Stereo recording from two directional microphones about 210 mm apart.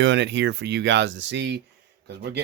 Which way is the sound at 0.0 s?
60° right (ahead or behind).